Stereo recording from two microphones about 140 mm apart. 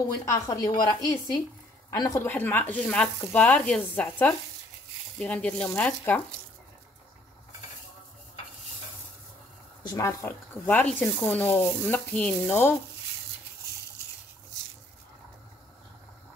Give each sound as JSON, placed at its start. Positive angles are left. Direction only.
{"t": 0.2, "sound": "speech", "side_deg": 25}
{"t": 9.8, "sound": "speech", "side_deg": 25}
{"t": 10.2, "sound": "speech", "side_deg": 15}